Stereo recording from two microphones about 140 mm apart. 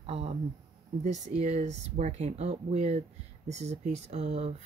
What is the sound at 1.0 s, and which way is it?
Speech, 55° right (ahead or behind).